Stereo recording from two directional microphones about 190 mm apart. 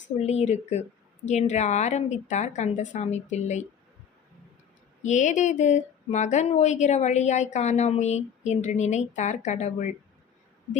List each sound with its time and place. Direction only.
0.2 s a woman's voice: 35° left (ahead or behind)
5.0 s a woman's voice: 40° left (ahead or behind)